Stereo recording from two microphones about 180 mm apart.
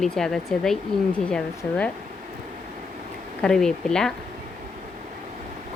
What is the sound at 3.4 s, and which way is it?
Speech, 5° left (ahead or behind).